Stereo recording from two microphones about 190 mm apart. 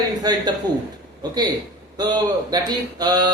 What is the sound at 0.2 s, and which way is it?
Speech, 20° right (ahead or behind).